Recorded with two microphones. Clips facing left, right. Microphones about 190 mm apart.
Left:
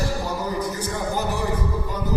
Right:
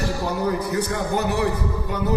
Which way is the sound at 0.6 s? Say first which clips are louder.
Right 2 dB; 65° right (ahead or behind).